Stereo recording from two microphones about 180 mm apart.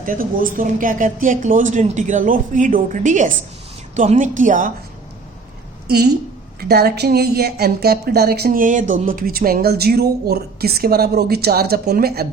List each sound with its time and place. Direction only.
0.0 s speech: 50° right (ahead or behind)
5.9 s a woman's voice: 65° right (ahead or behind)